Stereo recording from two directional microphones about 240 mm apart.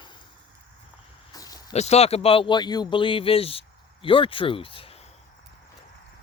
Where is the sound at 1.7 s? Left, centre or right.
Left.